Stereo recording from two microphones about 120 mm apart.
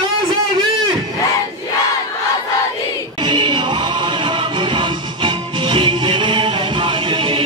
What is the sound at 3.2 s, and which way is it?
Music, 40° right (ahead or behind).